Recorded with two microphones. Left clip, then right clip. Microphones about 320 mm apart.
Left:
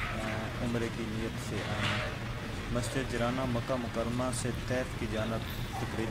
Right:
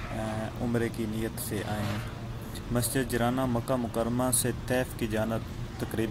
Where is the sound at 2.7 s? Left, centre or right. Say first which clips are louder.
Right 5 dB; centre.